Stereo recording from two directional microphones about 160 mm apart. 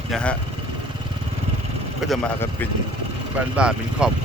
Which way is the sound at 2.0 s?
Centre (ahead or behind).